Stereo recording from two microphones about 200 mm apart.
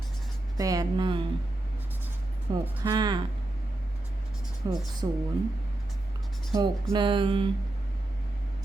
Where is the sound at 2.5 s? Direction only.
20° right (ahead or behind).